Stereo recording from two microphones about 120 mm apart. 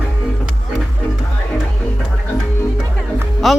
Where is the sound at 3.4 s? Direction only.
Centre (ahead or behind).